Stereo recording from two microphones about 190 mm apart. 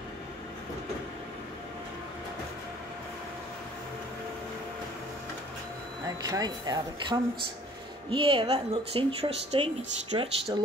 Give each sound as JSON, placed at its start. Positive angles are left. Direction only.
{"t": 6.0, "sound": "a woman's voice", "side_deg": -20}